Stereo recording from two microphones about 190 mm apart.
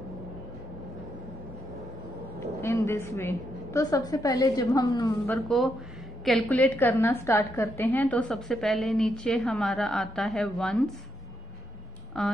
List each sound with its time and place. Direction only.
2.4 s a woman's voice: 15° left (ahead or behind)
5.2 s a woman's voice: 5° left (ahead or behind)
12.2 s a woman's voice: 5° left (ahead or behind)